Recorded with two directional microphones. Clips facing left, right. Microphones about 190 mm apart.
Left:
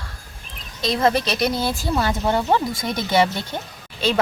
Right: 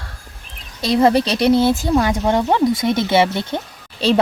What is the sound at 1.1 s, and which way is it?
Speech, 30° right (ahead or behind).